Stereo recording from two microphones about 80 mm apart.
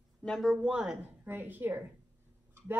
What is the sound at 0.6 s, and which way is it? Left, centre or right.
Speech, centre.